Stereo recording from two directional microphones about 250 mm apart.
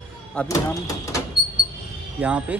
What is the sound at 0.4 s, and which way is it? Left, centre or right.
Speech, centre.